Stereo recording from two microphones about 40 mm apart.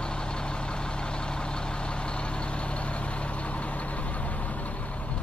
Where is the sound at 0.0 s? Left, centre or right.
Left.